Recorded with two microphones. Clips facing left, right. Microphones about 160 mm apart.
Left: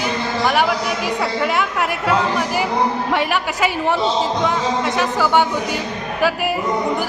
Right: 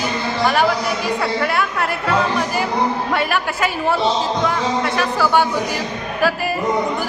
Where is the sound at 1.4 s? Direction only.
15° left (ahead or behind).